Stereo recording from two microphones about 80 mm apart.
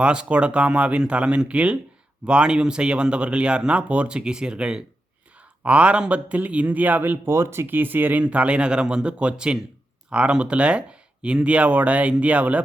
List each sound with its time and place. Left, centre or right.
0.0 s speech: centre